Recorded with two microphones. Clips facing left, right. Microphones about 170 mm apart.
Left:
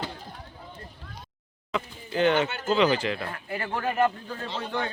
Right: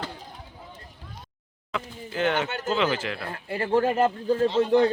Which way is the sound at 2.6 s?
Centre (ahead or behind).